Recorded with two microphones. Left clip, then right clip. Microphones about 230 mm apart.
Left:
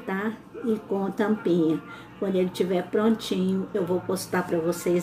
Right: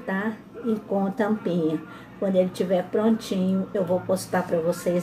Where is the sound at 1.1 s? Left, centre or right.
Left.